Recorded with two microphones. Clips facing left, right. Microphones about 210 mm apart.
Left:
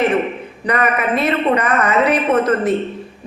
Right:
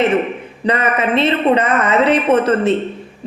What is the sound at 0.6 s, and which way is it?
A woman's voice, 25° right (ahead or behind).